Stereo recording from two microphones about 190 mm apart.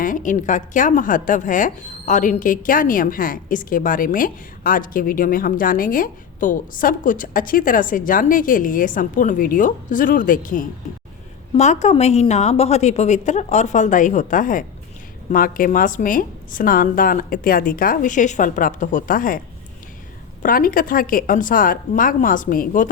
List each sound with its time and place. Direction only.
0.0 s a woman's voice: 45° left (ahead or behind)
20.4 s a woman's voice: 50° left (ahead or behind)